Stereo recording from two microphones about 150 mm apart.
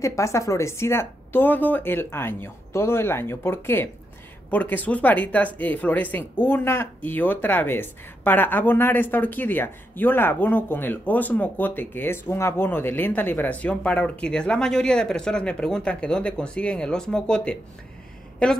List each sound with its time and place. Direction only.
0.0 s speech: 20° left (ahead or behind); by 17.6 s 5° left (ahead or behind)